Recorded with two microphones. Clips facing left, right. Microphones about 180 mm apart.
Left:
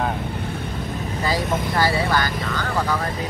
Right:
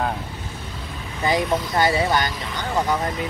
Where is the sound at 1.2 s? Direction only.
20° right (ahead or behind).